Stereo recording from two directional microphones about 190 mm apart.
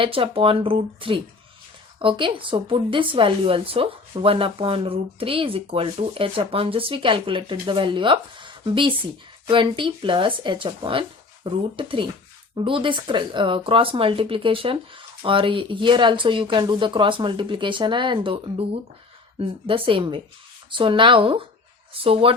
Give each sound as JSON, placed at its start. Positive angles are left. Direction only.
{"t": 0.0, "sound": "speech", "side_deg": -30}